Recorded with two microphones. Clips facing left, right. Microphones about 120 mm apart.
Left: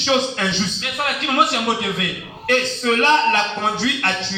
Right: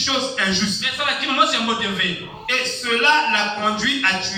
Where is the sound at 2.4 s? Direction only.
35° left (ahead or behind).